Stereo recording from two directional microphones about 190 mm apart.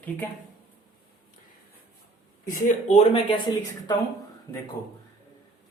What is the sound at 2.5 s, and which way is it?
Speech, 40° left (ahead or behind).